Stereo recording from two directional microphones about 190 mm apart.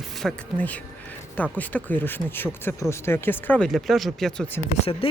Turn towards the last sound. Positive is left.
turn(degrees=30)  # may be behind; listen again after turning